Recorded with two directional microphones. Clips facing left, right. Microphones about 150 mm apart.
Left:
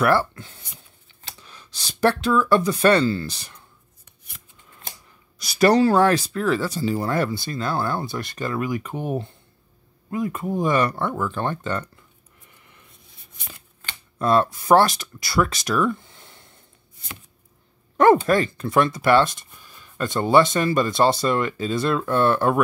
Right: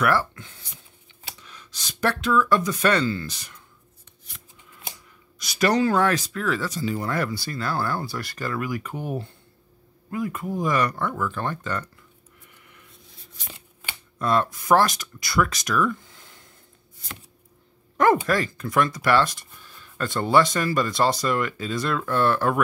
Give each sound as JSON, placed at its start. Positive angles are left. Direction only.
{"t": 0.0, "sound": "speech", "side_deg": 30}
{"t": 5.4, "sound": "speech", "side_deg": 35}
{"t": 14.1, "sound": "speech", "side_deg": 30}
{"t": 18.2, "sound": "speech", "side_deg": 25}